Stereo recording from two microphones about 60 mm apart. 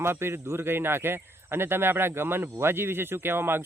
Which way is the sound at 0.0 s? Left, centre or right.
Right.